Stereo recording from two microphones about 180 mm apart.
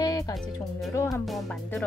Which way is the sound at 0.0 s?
20° left (ahead or behind).